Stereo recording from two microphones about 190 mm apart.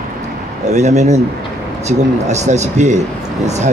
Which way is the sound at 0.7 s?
35° right (ahead or behind).